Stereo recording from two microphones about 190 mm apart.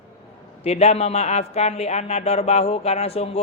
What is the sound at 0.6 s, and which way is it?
A man's voice, 35° left (ahead or behind).